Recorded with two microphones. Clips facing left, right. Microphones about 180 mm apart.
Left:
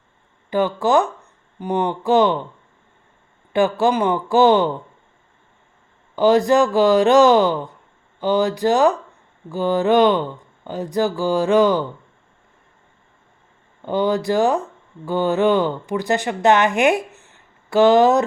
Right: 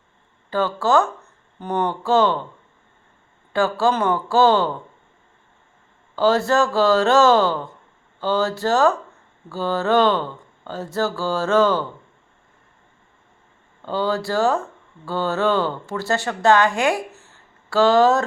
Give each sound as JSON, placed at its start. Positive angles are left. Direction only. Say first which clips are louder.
{"t": 0.5, "sound": "speech", "louder": "left 2 dB", "side_deg": 15}
{"t": 3.5, "sound": "speech", "louder": "left 2 dB", "side_deg": 20}
{"t": 6.1, "sound": "speech", "louder": "left 3 dB", "side_deg": 15}
{"t": 13.8, "sound": "speech", "louder": "left 4 dB", "side_deg": 20}